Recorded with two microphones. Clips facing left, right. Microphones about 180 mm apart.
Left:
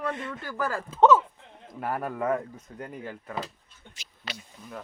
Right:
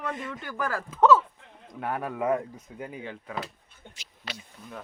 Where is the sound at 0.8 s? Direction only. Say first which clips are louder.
Left 1 dB; 25° left (ahead or behind).